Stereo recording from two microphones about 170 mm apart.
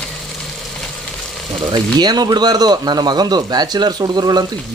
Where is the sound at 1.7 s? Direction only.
25° right (ahead or behind).